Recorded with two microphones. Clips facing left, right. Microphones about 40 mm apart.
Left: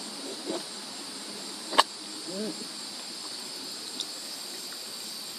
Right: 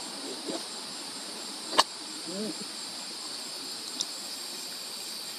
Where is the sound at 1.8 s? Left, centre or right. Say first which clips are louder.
Left 2 dB; left.